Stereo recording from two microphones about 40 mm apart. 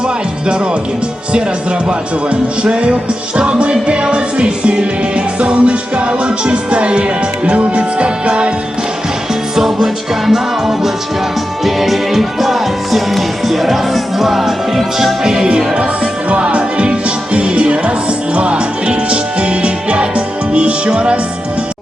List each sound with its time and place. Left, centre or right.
1.9 s music: right
9.6 s music: centre; by 21.2 s right